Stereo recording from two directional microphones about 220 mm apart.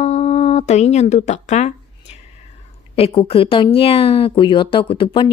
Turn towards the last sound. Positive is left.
turn(degrees=20)  # may be behind; listen again after turning